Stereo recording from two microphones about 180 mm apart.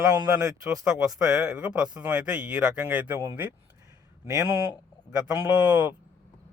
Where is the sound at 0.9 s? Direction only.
5° right (ahead or behind).